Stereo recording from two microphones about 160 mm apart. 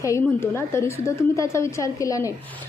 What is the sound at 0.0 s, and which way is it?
A woman's voice, 15° left (ahead or behind).